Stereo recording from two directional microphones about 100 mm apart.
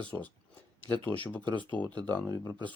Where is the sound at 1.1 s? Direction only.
15° left (ahead or behind).